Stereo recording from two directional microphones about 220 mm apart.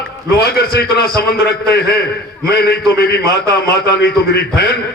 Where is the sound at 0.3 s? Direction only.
45° left (ahead or behind).